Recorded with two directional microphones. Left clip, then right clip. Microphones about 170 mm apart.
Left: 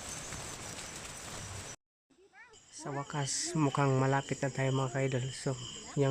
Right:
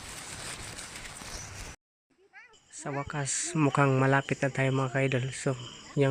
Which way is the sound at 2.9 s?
25° right (ahead or behind).